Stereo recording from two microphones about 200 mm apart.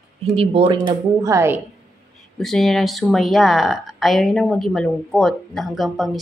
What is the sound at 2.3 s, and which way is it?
Speech, centre (ahead or behind).